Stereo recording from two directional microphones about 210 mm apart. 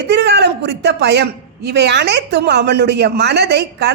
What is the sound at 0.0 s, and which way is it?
A woman's voice, 55° right (ahead or behind).